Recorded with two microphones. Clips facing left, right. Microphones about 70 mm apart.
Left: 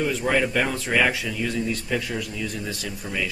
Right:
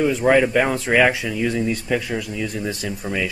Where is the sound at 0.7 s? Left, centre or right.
Right; by 2.3 s centre.